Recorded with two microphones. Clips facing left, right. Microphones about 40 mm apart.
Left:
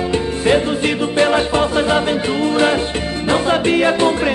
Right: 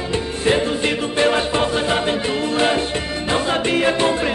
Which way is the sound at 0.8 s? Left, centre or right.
Left.